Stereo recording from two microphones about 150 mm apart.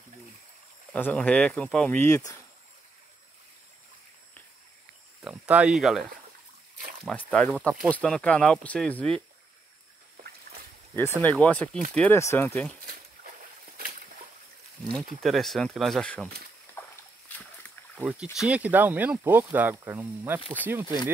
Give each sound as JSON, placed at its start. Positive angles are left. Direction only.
{"t": 0.9, "sound": "speech", "side_deg": 10}
{"t": 2.0, "sound": "speech", "side_deg": 20}
{"t": 5.2, "sound": "speech", "side_deg": -10}
{"t": 7.1, "sound": "speech", "side_deg": 5}
{"t": 11.2, "sound": "speech", "side_deg": 10}
{"t": 12.2, "sound": "speech", "side_deg": 20}
{"t": 13.7, "sound": "a sound", "side_deg": -65}
{"t": 15.2, "sound": "speech", "side_deg": 0}
{"t": 16.7, "sound": "a sound", "side_deg": 10}
{"t": 17.9, "sound": "speech", "side_deg": -10}